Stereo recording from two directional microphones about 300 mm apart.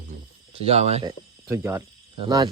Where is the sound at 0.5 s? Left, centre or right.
Centre.